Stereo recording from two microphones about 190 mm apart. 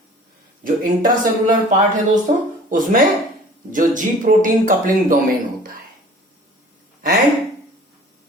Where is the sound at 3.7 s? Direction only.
45° right (ahead or behind).